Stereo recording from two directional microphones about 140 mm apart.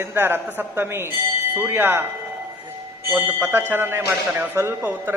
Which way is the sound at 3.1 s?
15° right (ahead or behind).